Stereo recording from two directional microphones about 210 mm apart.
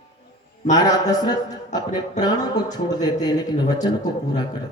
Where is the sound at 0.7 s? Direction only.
20° left (ahead or behind).